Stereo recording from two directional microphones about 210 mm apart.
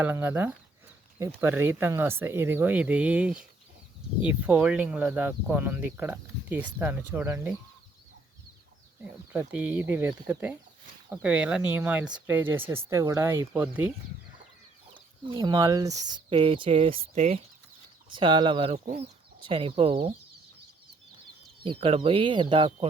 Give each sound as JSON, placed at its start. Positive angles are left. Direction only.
{"t": 0.0, "sound": "speech", "side_deg": -10}
{"t": 9.3, "sound": "speech", "side_deg": -5}
{"t": 14.9, "sound": "speech", "side_deg": -20}
{"t": 21.6, "sound": "speech", "side_deg": -25}